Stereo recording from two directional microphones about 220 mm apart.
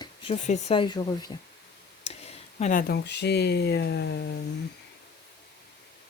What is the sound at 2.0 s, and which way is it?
Speech, 30° left (ahead or behind).